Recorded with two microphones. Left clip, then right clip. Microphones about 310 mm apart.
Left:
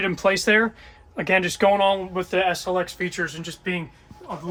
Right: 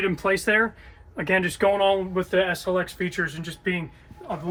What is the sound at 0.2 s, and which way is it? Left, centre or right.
Speech, centre.